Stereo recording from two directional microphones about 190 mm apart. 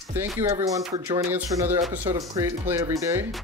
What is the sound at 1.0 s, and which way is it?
Speech, 15° right (ahead or behind).